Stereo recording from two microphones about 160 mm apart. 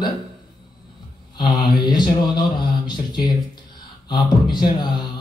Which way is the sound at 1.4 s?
25° left (ahead or behind).